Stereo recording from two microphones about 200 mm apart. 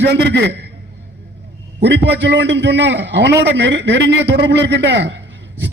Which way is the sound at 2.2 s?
60° right (ahead or behind).